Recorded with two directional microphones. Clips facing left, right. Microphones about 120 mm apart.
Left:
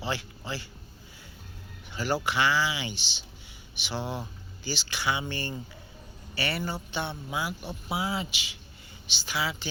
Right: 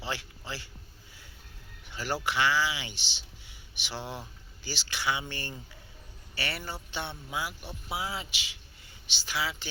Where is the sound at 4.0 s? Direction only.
35° left (ahead or behind).